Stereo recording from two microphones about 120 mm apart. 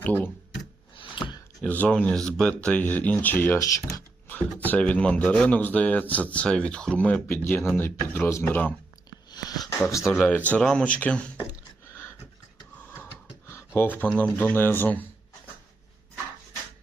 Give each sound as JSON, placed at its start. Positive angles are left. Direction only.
{"t": 0.0, "sound": "speech", "side_deg": 15}
{"t": 0.9, "sound": "a sound", "side_deg": 40}
{"t": 1.6, "sound": "speech", "side_deg": 10}
{"t": 4.3, "sound": "speech", "side_deg": 15}
{"t": 9.3, "sound": "a sound", "side_deg": 35}
{"t": 10.1, "sound": "speech", "side_deg": 10}
{"t": 13.7, "sound": "speech", "side_deg": 15}